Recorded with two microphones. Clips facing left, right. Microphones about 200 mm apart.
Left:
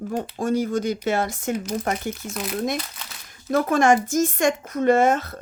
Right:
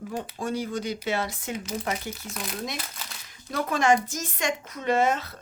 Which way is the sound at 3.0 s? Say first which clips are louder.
Left 1 dB; 5° right (ahead or behind).